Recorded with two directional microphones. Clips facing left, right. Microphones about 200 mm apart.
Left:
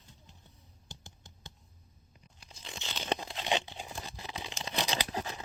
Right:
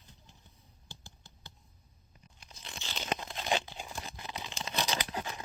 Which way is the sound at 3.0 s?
30° left (ahead or behind).